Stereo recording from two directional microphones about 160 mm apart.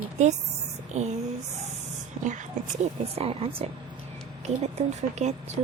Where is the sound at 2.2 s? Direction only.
45° right (ahead or behind).